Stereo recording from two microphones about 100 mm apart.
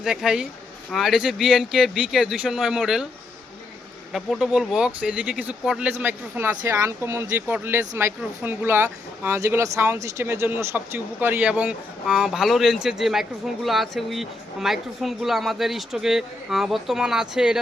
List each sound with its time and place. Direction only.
0.0 s speech: 5° right (ahead or behind)
4.1 s speech: 5° right (ahead or behind)